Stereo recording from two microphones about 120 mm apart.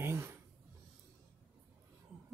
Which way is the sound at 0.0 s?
20° right (ahead or behind).